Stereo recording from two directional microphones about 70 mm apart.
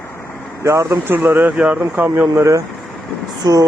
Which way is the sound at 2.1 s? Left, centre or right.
Right.